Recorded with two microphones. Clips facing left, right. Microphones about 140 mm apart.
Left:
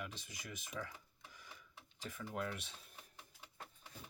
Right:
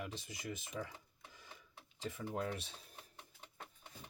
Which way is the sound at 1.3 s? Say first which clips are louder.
Even; 30° right (ahead or behind).